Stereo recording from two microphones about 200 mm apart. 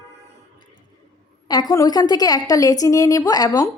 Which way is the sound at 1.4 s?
20° left (ahead or behind).